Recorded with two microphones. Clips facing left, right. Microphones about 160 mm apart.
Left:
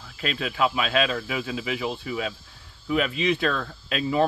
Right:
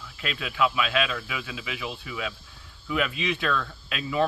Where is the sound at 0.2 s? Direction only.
35° left (ahead or behind).